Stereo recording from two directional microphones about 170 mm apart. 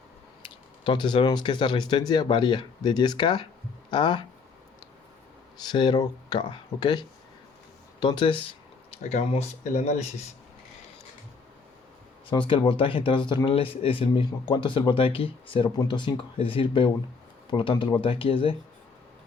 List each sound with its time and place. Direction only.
0.4 s speech: 30° left (ahead or behind)
5.6 s speech: 25° left (ahead or behind); by 10.2 s 40° left (ahead or behind)
12.3 s speech: 30° left (ahead or behind)